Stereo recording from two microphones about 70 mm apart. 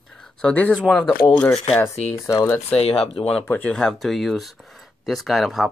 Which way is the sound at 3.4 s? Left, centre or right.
Left.